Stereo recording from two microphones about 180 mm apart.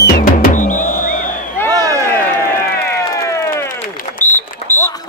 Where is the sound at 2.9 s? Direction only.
20° left (ahead or behind).